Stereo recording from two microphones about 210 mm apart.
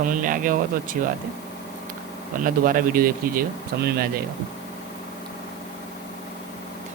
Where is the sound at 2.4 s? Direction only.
40° right (ahead or behind).